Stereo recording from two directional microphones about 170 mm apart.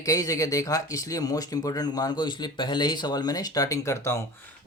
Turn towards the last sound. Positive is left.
turn(degrees=15)  # may be behind; listen again after turning